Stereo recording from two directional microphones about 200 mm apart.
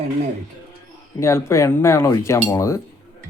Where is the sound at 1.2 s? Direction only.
15° left (ahead or behind).